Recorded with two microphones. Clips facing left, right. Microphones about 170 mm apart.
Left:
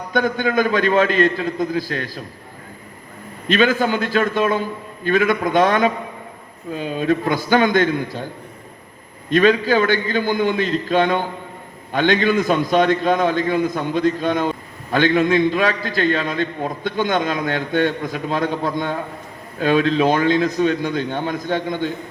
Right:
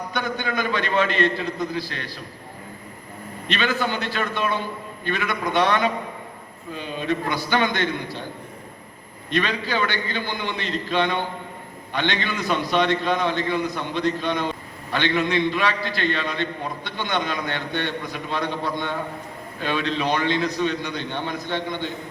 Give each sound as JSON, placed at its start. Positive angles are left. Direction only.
{"t": 0.1, "sound": "a man's voice", "side_deg": 45}
{"t": 3.5, "sound": "a man's voice", "side_deg": 45}
{"t": 9.3, "sound": "a man's voice", "side_deg": 45}